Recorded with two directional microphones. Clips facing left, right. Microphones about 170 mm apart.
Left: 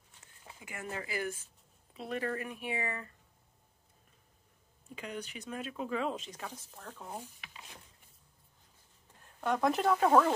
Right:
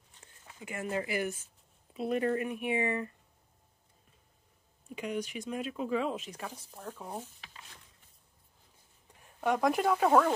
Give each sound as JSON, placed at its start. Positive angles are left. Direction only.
{"t": 0.7, "sound": "speech", "side_deg": -25}
{"t": 4.9, "sound": "speech", "side_deg": -10}
{"t": 9.4, "sound": "speech", "side_deg": -10}